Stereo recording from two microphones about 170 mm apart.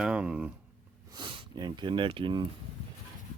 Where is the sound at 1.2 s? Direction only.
30° right (ahead or behind).